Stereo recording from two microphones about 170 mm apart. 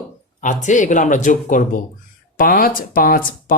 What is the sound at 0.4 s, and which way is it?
Speech, 45° left (ahead or behind).